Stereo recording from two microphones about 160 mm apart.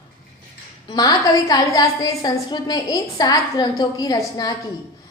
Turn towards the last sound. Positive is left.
turn(degrees=25)  # may be behind; listen again after turning